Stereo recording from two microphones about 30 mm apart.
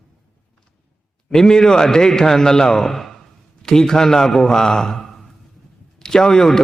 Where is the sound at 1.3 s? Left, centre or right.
Centre.